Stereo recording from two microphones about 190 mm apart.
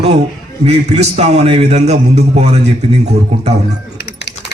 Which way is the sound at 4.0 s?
60° left (ahead or behind).